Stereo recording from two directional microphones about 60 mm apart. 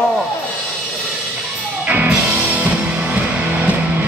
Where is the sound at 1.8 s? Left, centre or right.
Right.